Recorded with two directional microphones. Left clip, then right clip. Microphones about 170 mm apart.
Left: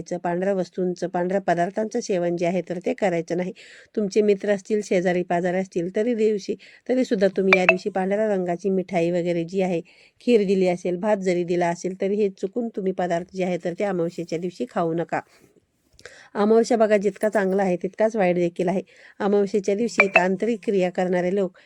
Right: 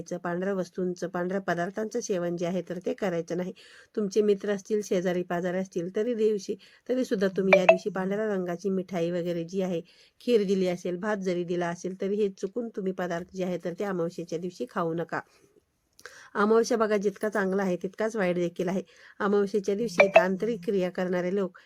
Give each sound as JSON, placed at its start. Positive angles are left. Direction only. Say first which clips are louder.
{"t": 0.0, "sound": "a woman's voice", "louder": "left 7 dB", "side_deg": 20}